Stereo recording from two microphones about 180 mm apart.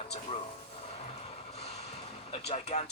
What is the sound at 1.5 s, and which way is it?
Vehicle, 35° left (ahead or behind).